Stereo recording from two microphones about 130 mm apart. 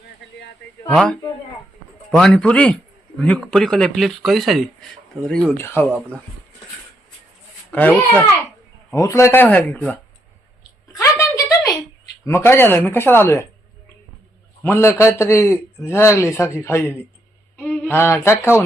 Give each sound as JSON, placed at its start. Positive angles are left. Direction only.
{"t": 0.9, "sound": "speech", "side_deg": 5}
{"t": 5.5, "sound": "speech", "side_deg": 15}
{"t": 7.7, "sound": "speech", "side_deg": 10}
{"t": 8.9, "sound": "speech", "side_deg": 25}
{"t": 10.9, "sound": "a sound", "side_deg": 25}
{"t": 12.2, "sound": "speech", "side_deg": 20}
{"t": 14.6, "sound": "a man's voice", "side_deg": 20}